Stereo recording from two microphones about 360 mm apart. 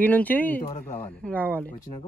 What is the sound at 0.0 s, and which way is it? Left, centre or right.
Speech, centre.